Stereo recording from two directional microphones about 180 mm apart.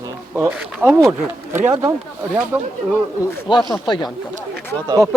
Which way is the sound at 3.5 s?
25° left (ahead or behind).